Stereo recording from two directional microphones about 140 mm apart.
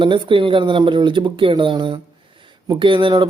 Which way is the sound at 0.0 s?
35° right (ahead or behind).